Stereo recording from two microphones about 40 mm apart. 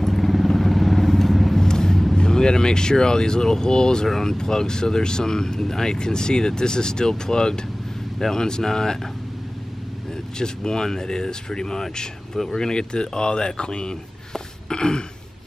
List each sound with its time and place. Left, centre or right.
0.0 s vehicle: centre
1.6 s vehicle: centre
2.1 s speech: centre
10.4 s speech: centre